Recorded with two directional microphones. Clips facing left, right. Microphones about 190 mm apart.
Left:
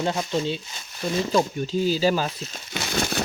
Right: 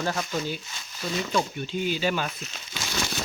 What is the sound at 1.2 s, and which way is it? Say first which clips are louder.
Speech: left 5 dB; 35° left (ahead or behind).